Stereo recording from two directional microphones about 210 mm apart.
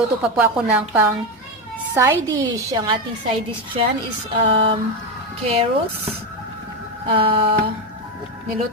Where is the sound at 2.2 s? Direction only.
15° right (ahead or behind).